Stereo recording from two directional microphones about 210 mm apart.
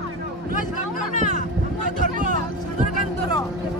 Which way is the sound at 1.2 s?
35° right (ahead or behind).